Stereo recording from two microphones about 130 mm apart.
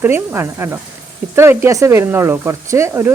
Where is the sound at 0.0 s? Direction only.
15° right (ahead or behind).